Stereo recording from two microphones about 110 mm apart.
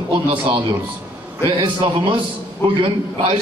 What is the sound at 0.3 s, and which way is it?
A man's voice, 45° right (ahead or behind).